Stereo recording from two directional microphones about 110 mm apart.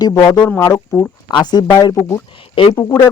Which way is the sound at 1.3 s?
40° left (ahead or behind).